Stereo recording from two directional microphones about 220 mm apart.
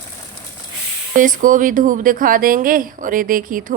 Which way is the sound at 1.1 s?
35° right (ahead or behind).